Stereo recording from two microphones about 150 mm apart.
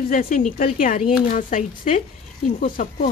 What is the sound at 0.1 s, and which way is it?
Speech, 65° left (ahead or behind).